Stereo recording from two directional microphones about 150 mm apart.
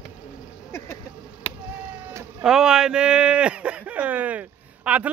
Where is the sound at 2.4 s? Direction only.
5° right (ahead or behind).